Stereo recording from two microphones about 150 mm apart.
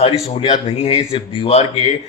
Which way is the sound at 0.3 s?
40° left (ahead or behind).